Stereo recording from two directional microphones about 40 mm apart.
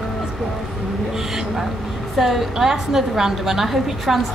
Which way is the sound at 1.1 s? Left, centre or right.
Centre.